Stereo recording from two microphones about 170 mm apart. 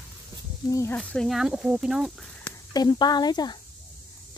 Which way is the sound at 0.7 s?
20° left (ahead or behind).